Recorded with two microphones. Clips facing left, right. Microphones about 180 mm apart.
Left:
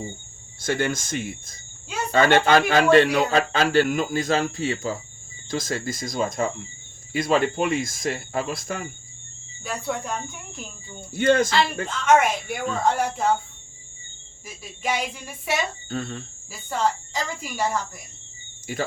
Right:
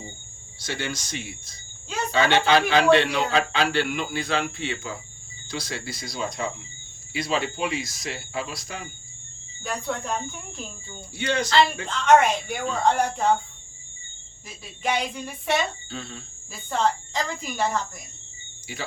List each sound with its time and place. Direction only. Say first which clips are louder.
0.6 s speech: left 7 dB; 50° left (ahead or behind)
9.6 s speech: even; 5° left (ahead or behind)
11.1 s speech: left 5 dB; 50° left (ahead or behind)
11.9 s speech: even; 5° left (ahead or behind)
14.4 s speech: even; 10° left (ahead or behind)
15.9 s speech: left 6 dB; 50° left (ahead or behind)
16.5 s speech: even; 5° left (ahead or behind)
18.7 s speech: left 8 dB; 45° left (ahead or behind)